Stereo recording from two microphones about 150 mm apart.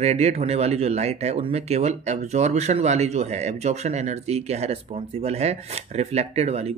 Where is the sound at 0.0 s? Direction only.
45° right (ahead or behind).